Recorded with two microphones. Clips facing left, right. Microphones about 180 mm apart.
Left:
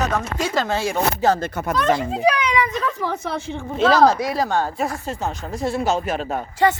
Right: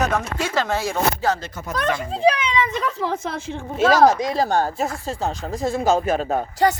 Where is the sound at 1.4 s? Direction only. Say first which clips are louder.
Left 7 dB; 55° left (ahead or behind).